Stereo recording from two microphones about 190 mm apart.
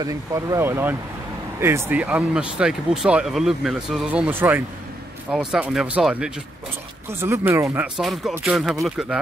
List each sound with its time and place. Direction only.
0.0 s speech: 15° right (ahead or behind)